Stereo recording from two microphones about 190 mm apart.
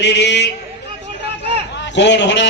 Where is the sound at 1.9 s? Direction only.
70° left (ahead or behind).